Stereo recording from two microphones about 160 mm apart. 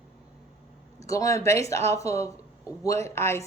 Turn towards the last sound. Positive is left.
turn(degrees=15)  # may be behind; listen again after turning